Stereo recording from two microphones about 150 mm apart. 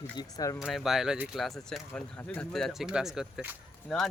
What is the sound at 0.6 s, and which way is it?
Speech, centre (ahead or behind).